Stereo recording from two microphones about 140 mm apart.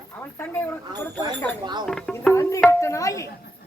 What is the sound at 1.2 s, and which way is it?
Speech, 30° right (ahead or behind).